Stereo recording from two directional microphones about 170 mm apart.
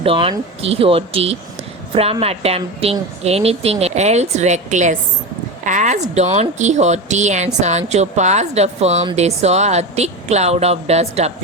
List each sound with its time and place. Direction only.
0.0 s a woman's voice: 30° right (ahead or behind)